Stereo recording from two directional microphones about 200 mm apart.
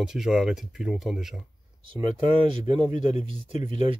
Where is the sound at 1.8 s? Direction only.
25° right (ahead or behind).